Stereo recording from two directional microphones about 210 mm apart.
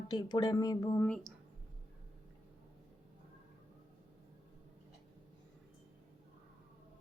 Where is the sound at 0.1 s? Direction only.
20° left (ahead or behind).